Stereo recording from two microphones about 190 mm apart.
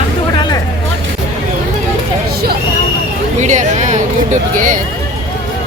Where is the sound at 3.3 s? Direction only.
40° right (ahead or behind).